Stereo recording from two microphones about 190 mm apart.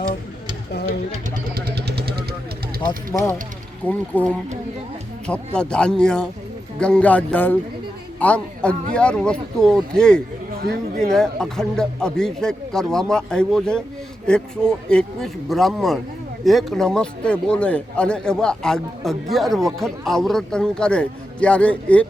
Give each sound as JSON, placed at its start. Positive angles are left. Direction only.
{"t": 1.5, "sound": "vehicle", "side_deg": -55}
{"t": 3.1, "sound": "speech", "side_deg": 15}
{"t": 5.5, "sound": "a man's voice", "side_deg": 5}